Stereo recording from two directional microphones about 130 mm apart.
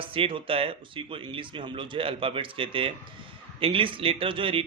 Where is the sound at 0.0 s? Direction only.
45° right (ahead or behind).